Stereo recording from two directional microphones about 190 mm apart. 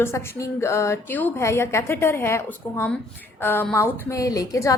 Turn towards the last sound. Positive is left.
turn(degrees=15)  # may be behind; listen again after turning